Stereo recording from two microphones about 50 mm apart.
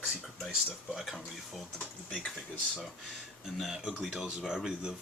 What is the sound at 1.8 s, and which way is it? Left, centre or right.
Speech, centre.